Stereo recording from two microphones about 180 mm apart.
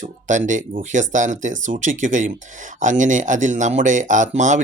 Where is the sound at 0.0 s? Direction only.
45° right (ahead or behind).